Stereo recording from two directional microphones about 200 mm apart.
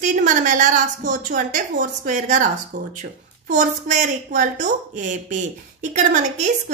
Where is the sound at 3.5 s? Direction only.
35° right (ahead or behind).